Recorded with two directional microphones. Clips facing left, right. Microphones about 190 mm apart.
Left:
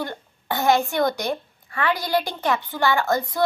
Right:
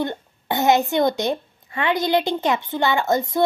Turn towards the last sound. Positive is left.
turn(degrees=-20)  # may be behind; listen again after turning